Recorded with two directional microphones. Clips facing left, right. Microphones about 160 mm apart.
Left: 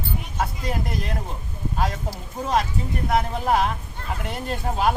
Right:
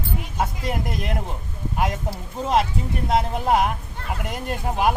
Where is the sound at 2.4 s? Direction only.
20° right (ahead or behind).